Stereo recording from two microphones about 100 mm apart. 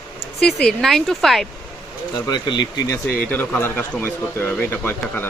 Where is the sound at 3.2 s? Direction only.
15° left (ahead or behind).